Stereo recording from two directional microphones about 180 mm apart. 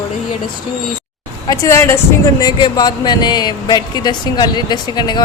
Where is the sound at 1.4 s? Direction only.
15° left (ahead or behind).